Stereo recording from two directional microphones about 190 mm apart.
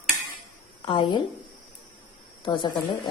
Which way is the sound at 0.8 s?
25° left (ahead or behind).